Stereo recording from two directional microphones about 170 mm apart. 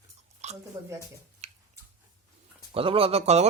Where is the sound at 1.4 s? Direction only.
40° right (ahead or behind).